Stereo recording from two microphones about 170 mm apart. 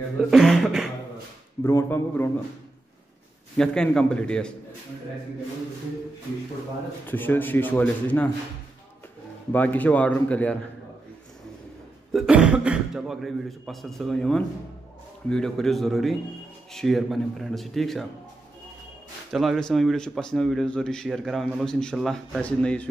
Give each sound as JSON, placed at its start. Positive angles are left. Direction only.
{"t": 0.2, "sound": "speech", "side_deg": 0}
{"t": 1.6, "sound": "speech", "side_deg": 15}
{"t": 3.5, "sound": "speech", "side_deg": 5}
{"t": 7.1, "sound": "speech", "side_deg": 10}
{"t": 9.5, "sound": "speech", "side_deg": 10}
{"t": 12.1, "sound": "speech", "side_deg": -5}
{"t": 19.3, "sound": "speech", "side_deg": 0}